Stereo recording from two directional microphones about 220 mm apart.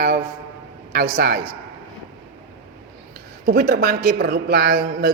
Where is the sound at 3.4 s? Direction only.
45° right (ahead or behind).